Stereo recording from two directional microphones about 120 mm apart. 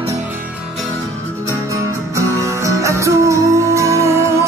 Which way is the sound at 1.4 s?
25° right (ahead or behind).